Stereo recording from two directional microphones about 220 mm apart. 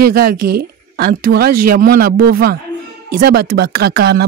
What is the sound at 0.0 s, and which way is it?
Speech, 45° right (ahead or behind).